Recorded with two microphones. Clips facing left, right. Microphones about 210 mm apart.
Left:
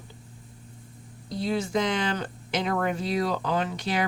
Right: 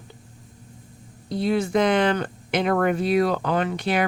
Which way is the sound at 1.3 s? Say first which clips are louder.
Right 5 dB; 60° right (ahead or behind).